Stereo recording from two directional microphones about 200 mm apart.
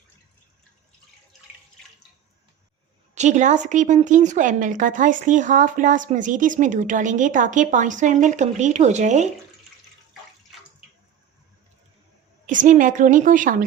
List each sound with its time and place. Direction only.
3.2 s a woman's voice: 35° right (ahead or behind)
12.5 s a woman's voice: 40° right (ahead or behind)